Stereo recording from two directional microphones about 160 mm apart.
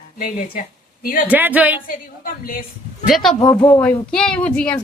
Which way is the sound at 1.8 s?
60° left (ahead or behind).